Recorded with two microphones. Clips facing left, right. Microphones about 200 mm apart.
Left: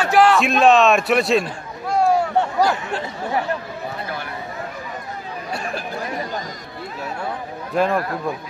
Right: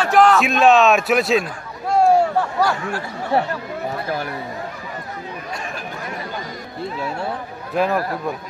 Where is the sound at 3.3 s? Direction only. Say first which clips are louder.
Right 5 dB; 30° right (ahead or behind).